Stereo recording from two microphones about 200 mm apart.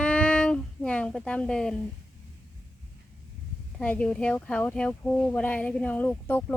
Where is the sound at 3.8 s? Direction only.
5° left (ahead or behind).